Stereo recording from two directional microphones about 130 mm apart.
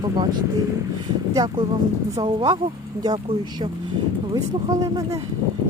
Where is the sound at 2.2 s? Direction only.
35° right (ahead or behind).